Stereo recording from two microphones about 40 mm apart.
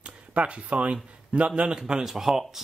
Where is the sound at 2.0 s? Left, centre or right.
Centre.